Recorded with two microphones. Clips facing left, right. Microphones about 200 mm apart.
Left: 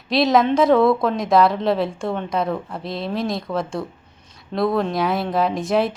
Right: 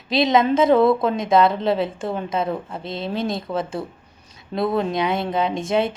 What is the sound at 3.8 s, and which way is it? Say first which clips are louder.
Speech: left 1 dB; 25° right (ahead or behind).